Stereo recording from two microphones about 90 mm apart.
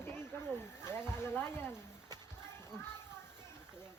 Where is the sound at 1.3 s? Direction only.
20° left (ahead or behind).